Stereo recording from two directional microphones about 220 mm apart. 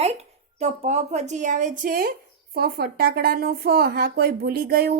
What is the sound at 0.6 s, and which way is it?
Speech, 30° right (ahead or behind).